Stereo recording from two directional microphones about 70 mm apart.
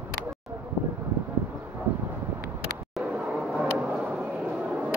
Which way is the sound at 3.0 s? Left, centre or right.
Centre.